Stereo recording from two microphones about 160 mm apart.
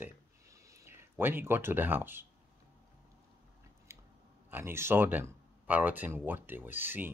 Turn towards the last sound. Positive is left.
turn(degrees=-10)  # may be behind; listen again after turning